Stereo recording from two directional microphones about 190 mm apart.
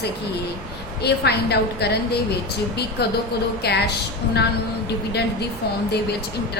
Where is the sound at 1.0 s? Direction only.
60° left (ahead or behind).